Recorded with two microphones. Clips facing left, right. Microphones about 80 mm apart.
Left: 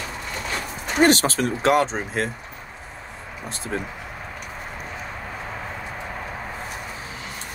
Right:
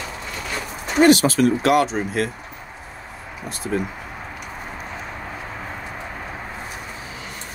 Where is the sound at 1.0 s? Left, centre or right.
Left.